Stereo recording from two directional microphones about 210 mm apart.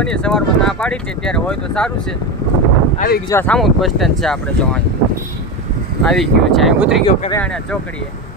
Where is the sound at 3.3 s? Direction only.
5° left (ahead or behind).